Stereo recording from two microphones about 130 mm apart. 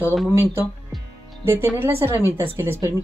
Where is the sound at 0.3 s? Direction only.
15° right (ahead or behind).